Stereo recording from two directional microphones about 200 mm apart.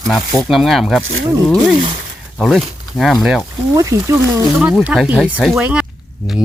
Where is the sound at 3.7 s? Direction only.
15° right (ahead or behind).